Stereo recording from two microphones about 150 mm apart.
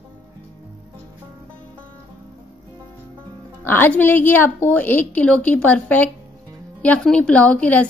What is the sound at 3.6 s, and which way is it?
Speech, 15° left (ahead or behind).